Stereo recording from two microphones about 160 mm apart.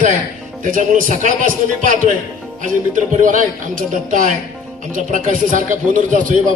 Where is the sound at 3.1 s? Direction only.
55° right (ahead or behind).